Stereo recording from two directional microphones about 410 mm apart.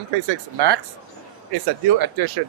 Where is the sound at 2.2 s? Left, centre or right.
Right.